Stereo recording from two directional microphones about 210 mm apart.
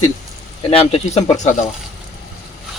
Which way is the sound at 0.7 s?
25° left (ahead or behind).